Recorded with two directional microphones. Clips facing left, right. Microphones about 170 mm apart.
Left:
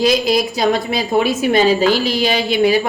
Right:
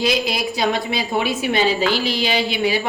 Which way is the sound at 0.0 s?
40° left (ahead or behind).